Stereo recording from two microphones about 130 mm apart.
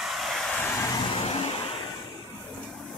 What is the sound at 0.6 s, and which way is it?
Vehicle, 15° left (ahead or behind).